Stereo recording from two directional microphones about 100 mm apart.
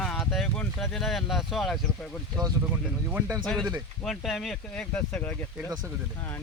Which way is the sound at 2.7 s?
15° right (ahead or behind).